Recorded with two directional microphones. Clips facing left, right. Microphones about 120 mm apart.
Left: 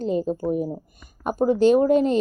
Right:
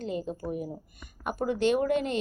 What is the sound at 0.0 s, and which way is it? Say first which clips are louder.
Speech: left 9 dB; 40° left (ahead or behind).